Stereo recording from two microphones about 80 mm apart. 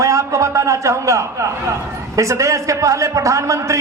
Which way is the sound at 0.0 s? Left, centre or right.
Right.